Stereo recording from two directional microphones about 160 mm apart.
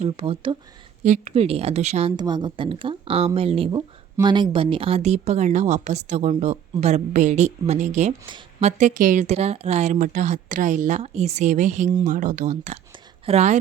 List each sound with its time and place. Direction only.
0.0 s speech: 35° right (ahead or behind)
1.0 s speech: 45° right (ahead or behind)
2.1 s speech: 25° right (ahead or behind); by 9.2 s 55° right (ahead or behind)
9.2 s speech: 40° right (ahead or behind)